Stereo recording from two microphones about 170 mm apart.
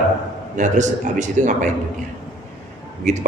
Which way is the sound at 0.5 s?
45° right (ahead or behind).